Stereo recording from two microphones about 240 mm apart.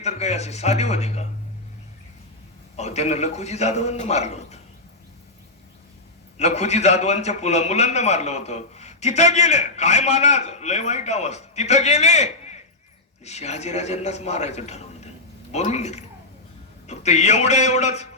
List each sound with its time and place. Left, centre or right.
0.0 s a man's voice: left
2.7 s a man's voice: left
6.3 s a man's voice: left